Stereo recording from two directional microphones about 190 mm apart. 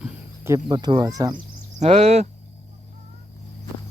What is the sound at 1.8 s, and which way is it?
Speech, 35° right (ahead or behind).